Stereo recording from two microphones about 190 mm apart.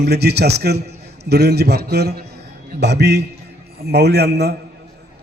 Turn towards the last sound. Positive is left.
turn(degrees=-60)  # may be behind; listen again after turning